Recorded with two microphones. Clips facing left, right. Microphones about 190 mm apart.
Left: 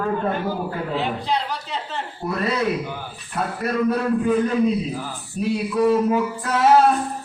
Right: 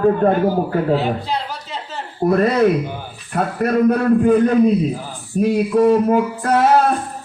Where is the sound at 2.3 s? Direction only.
50° right (ahead or behind).